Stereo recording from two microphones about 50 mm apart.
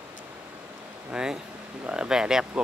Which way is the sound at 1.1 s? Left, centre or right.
Centre.